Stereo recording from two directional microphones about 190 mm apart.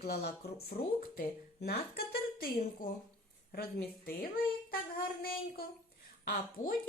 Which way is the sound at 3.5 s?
55° left (ahead or behind).